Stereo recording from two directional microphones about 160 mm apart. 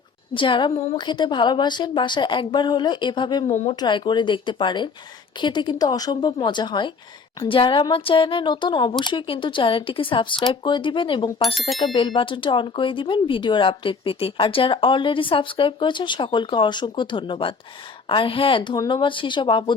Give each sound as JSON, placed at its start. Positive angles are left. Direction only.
{"t": 0.3, "sound": "a woman's voice", "side_deg": 30}